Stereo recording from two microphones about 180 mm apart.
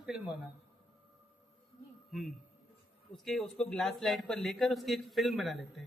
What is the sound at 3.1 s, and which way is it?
A man's voice, centre (ahead or behind).